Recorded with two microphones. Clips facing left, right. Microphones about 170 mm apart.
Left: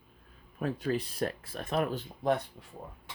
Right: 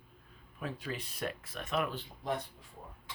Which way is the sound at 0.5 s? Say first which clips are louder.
Left 9 dB; 40° left (ahead or behind).